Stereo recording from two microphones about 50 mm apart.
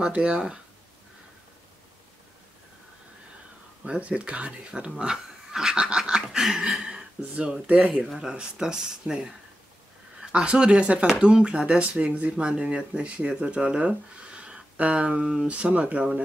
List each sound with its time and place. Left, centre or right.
0.0 s speech: right
3.8 s speech: right
6.4 s a sound: centre
7.6 s speech: right
7.9 s speech: centre
10.2 s speech: right